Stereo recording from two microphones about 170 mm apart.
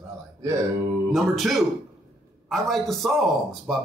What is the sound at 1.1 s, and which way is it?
A man's voice, centre (ahead or behind).